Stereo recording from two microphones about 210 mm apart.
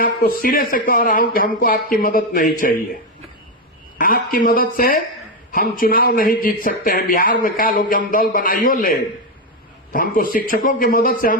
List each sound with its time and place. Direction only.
0.0 s a man's voice: 45° left (ahead or behind)
3.9 s a man's voice: 40° left (ahead or behind)